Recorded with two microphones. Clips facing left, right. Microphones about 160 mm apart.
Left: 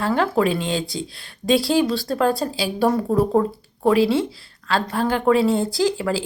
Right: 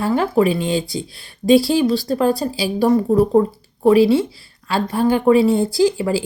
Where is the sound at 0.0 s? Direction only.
5° right (ahead or behind).